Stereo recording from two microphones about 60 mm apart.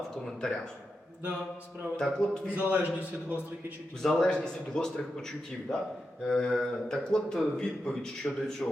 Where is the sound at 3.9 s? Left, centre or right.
Centre.